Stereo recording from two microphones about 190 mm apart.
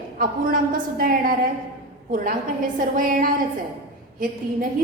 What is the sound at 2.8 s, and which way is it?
Speech, 45° right (ahead or behind).